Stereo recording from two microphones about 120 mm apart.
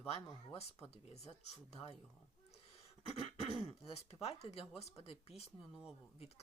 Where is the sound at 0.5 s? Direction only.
60° left (ahead or behind).